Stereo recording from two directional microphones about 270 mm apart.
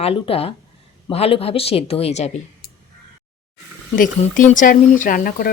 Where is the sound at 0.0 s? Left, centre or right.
Left.